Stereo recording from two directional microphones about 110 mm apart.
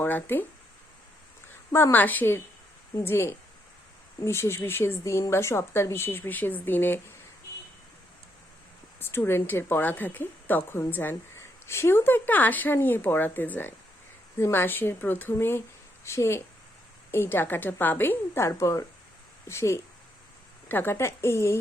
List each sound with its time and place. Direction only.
0.0 s speech: 15° left (ahead or behind)
1.7 s speech: 20° left (ahead or behind)
9.0 s speech: 20° left (ahead or behind)